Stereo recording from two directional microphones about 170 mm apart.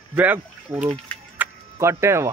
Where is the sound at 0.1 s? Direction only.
10° right (ahead or behind).